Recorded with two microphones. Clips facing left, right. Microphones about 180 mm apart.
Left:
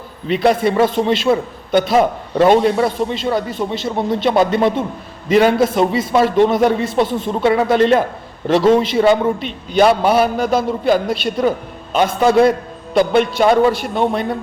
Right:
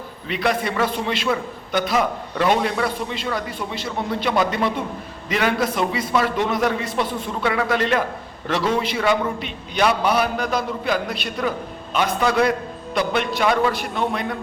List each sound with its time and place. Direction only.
0.3 s a man's voice: 30° left (ahead or behind)
5.3 s a man's voice: 40° left (ahead or behind)
5.5 s a man's voice: 25° left (ahead or behind)